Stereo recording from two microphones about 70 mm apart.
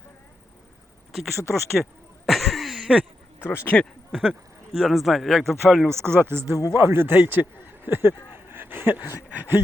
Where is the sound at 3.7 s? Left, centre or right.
Centre.